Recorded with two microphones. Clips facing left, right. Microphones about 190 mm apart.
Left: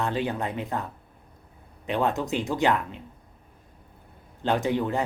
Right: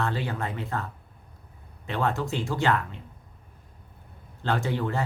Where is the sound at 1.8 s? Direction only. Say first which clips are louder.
Left 2 dB; 15° left (ahead or behind).